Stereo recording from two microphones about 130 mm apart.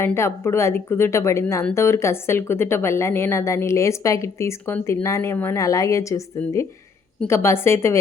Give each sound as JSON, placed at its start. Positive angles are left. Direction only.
{"t": 0.0, "sound": "speech", "side_deg": 20}